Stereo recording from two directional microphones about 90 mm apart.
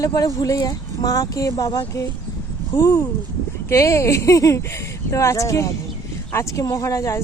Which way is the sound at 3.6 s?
35° left (ahead or behind).